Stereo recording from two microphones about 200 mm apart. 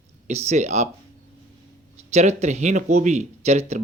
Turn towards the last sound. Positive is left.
turn(degrees=-35)  # may be behind; listen again after turning